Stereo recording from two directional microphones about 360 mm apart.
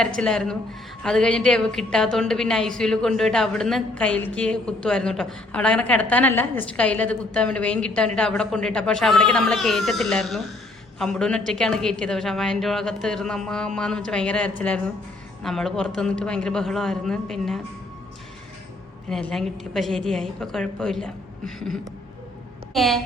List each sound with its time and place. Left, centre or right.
0.1 s a woman's voice: centre
19.1 s a woman's voice: centre